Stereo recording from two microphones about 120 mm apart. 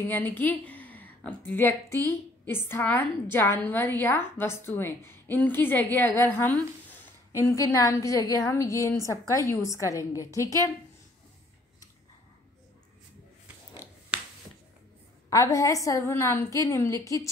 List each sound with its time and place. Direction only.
0.1 s a woman's voice: 15° left (ahead or behind)
15.2 s a woman's voice: 25° left (ahead or behind)